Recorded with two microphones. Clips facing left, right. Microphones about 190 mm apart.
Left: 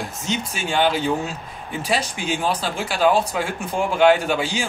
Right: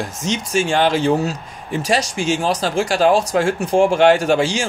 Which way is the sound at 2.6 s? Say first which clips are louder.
Right 5 dB; 40° right (ahead or behind).